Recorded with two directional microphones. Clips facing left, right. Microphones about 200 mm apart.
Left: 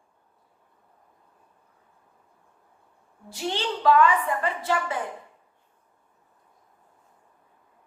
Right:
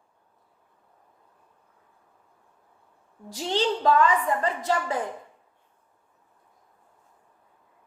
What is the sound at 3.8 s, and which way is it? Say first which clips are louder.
A woman's voice: left 4 dB; 40° right (ahead or behind).